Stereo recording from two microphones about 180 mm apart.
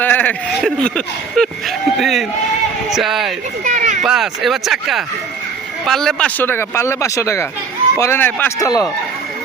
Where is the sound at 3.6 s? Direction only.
45° right (ahead or behind).